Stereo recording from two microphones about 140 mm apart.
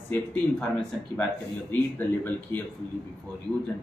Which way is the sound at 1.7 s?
15° left (ahead or behind).